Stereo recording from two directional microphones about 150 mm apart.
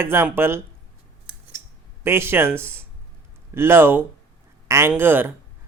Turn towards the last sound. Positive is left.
turn(degrees=-15)  # may be behind; listen again after turning